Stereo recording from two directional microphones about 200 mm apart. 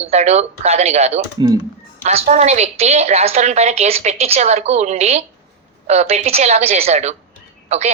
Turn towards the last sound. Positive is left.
turn(degrees=-35)  # may be behind; listen again after turning